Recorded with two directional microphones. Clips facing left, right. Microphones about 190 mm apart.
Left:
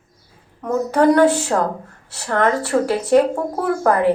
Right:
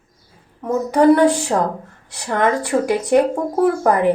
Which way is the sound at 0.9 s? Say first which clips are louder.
Right 1 dB; 15° right (ahead or behind).